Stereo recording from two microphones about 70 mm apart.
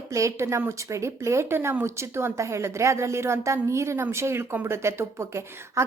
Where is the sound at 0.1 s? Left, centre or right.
Right.